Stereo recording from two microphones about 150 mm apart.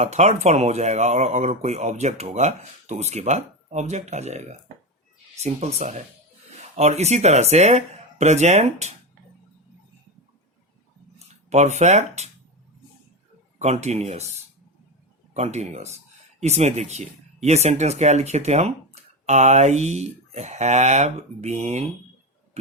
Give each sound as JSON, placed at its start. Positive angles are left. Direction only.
{"t": 0.0, "sound": "speech", "side_deg": -50}
{"t": 11.4, "sound": "speech", "side_deg": -50}
{"t": 13.6, "sound": "speech", "side_deg": -50}